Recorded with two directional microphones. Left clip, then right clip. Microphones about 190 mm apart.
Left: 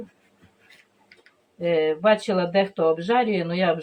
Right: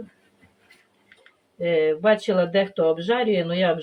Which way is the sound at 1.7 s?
35° right (ahead or behind).